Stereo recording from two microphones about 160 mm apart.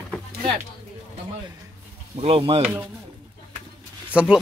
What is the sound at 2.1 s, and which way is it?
Speech, 35° right (ahead or behind).